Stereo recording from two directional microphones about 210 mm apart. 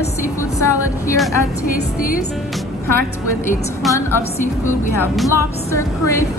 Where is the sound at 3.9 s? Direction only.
15° left (ahead or behind).